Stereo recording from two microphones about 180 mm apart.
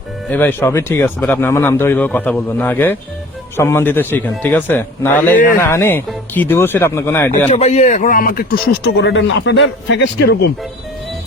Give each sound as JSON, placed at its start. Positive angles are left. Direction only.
{"t": 0.3, "sound": "speech", "side_deg": 10}
{"t": 7.5, "sound": "speech", "side_deg": 40}
{"t": 9.0, "sound": "a man's voice", "side_deg": 85}